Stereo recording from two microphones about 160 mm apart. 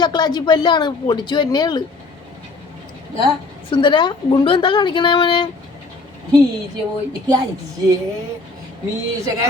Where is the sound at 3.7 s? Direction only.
30° left (ahead or behind).